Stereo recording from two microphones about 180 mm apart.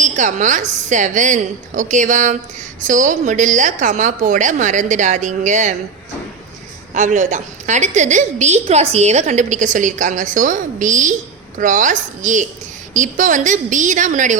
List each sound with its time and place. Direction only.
0.0 s a woman's voice: 45° right (ahead or behind)
6.9 s a woman's voice: 40° right (ahead or behind)